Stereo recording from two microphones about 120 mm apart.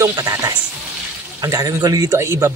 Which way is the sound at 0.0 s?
25° right (ahead or behind).